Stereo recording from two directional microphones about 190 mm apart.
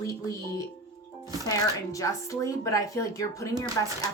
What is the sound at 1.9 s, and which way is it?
A woman's voice, 15° left (ahead or behind).